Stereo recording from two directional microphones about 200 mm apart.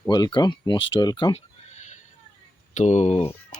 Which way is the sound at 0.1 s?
20° left (ahead or behind).